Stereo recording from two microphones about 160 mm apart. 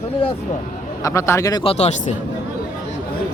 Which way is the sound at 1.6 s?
40° left (ahead or behind).